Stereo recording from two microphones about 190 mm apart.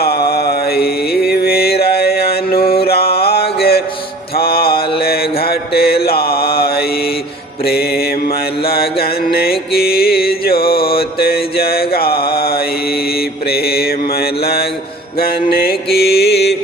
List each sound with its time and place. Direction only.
0.0 s mantra: 55° left (ahead or behind)
2.8 s music: 55° left (ahead or behind)
4.4 s mantra: 55° left (ahead or behind)
8.6 s music: 55° left (ahead or behind)
11.2 s mantra: 55° left (ahead or behind)